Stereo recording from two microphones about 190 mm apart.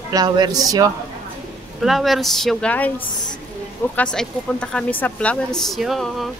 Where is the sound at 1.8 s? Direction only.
Centre (ahead or behind).